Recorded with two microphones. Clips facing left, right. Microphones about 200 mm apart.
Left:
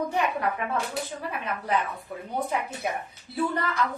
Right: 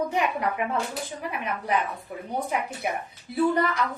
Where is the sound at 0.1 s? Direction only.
15° right (ahead or behind).